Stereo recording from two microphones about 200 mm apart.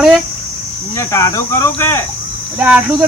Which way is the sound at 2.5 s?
5° right (ahead or behind).